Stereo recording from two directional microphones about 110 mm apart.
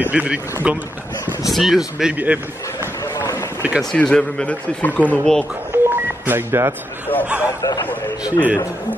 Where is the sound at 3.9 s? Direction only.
10° left (ahead or behind).